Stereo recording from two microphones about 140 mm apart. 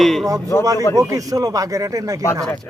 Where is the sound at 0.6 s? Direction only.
25° right (ahead or behind).